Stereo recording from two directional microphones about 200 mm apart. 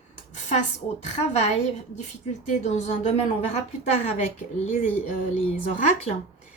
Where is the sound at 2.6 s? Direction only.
35° left (ahead or behind).